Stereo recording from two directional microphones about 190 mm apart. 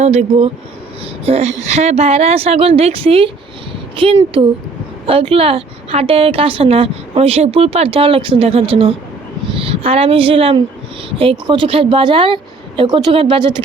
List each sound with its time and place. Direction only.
0.0 s a woman's voice: 35° right (ahead or behind)